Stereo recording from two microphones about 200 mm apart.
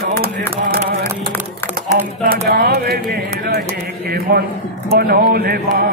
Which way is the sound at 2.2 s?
50° right (ahead or behind).